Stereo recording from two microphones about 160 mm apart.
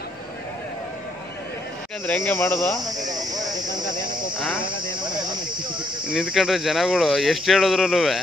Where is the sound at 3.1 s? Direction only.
25° right (ahead or behind).